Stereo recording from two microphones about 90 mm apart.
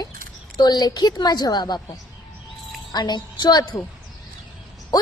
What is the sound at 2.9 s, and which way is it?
Child singing, 55° left (ahead or behind).